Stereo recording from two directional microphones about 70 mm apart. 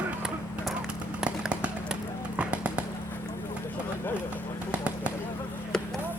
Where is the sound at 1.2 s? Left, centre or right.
Centre.